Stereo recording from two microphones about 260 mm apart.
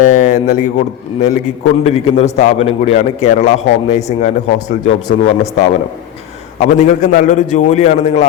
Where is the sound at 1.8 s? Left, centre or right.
Left.